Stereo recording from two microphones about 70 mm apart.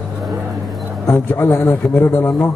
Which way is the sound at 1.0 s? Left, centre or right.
Left.